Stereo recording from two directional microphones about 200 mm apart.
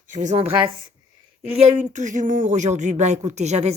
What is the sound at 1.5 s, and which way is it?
Speech, 30° right (ahead or behind).